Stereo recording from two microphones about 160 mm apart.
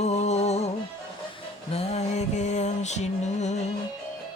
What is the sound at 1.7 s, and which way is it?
Music, 40° left (ahead or behind).